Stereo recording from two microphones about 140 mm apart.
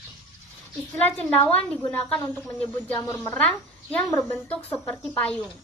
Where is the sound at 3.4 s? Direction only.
5° left (ahead or behind).